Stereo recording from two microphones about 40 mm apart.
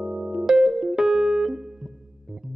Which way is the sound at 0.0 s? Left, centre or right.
Centre.